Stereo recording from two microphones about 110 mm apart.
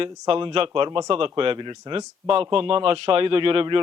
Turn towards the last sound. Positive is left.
turn(degrees=-50)  # may be behind; listen again after turning